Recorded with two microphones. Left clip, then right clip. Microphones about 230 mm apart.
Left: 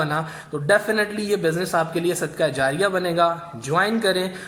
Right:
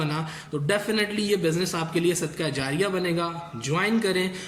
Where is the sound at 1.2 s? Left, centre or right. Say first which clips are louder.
Left 2 dB; right.